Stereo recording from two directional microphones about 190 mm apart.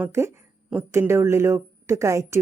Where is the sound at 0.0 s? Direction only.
15° right (ahead or behind).